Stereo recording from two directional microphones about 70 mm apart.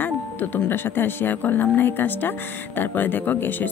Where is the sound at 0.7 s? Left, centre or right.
Left.